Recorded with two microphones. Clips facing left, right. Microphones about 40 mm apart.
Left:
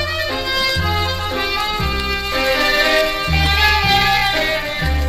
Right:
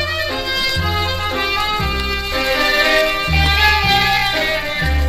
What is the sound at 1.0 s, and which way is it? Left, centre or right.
Music, centre.